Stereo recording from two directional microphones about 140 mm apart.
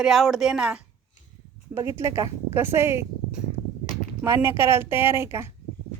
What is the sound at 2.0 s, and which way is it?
Speech, 20° right (ahead or behind).